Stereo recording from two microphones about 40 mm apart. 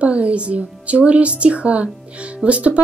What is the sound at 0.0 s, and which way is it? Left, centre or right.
A woman's voice, right.